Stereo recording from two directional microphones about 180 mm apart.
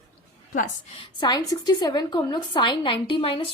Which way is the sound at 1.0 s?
25° left (ahead or behind).